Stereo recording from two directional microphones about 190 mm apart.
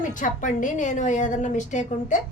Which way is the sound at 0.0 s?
45° left (ahead or behind).